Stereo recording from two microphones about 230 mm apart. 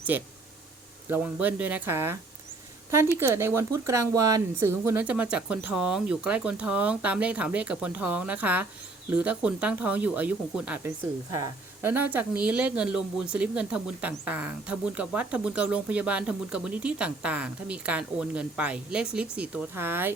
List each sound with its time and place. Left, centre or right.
0.1 s speech: centre